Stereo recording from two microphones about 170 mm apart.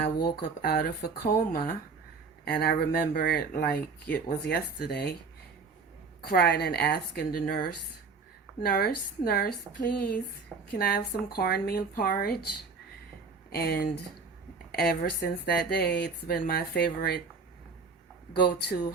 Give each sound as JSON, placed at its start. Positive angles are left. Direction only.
{"t": 0.0, "sound": "speech", "side_deg": 70}
{"t": 6.3, "sound": "speech", "side_deg": 65}
{"t": 10.8, "sound": "speech", "side_deg": 60}
{"t": 13.5, "sound": "speech", "side_deg": 65}
{"t": 18.4, "sound": "speech", "side_deg": 70}